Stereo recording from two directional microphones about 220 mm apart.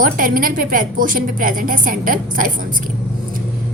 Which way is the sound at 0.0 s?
40° right (ahead or behind).